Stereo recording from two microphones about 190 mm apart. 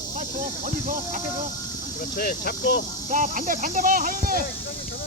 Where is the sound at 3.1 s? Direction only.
45° right (ahead or behind).